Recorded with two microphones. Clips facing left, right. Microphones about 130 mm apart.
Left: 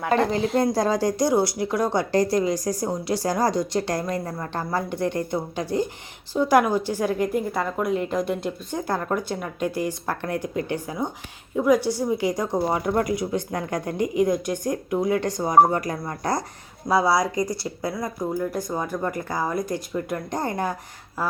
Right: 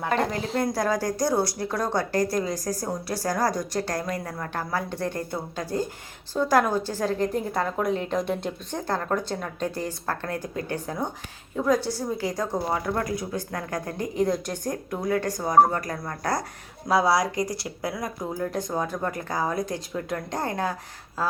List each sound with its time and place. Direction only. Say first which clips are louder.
0.1 s a woman's voice: left 6 dB; 25° left (ahead or behind)
16.9 s speech: left 1 dB; 10° right (ahead or behind)
18.2 s a woman's voice: left 4 dB; 5° left (ahead or behind)